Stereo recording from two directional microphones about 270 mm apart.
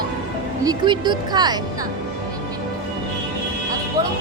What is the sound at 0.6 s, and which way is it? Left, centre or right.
Speech, centre.